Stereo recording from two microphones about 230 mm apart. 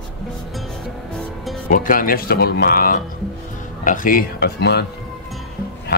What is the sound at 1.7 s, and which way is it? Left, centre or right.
Speech, left.